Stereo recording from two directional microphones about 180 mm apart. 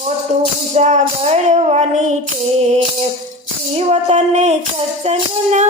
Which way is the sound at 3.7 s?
35° right (ahead or behind).